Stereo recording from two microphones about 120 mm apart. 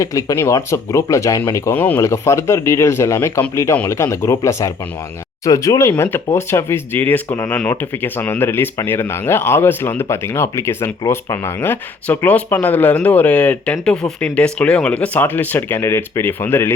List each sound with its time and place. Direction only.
0.0 s speech: 25° left (ahead or behind)
1.7 s speech: 15° left (ahead or behind)